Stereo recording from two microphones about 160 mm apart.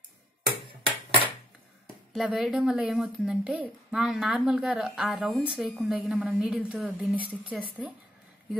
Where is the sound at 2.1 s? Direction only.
Centre (ahead or behind).